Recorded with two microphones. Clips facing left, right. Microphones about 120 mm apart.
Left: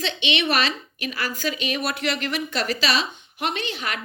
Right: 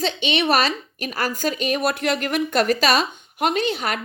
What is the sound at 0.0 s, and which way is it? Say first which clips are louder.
A woman's voice: right 3 dB; 40° right (ahead or behind).